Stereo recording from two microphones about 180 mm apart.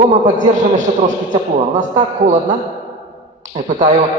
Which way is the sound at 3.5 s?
40° right (ahead or behind).